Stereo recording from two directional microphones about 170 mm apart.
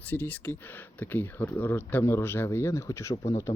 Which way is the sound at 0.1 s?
10° left (ahead or behind).